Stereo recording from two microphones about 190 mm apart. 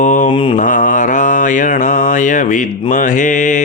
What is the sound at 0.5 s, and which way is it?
Mantra, 45° left (ahead or behind).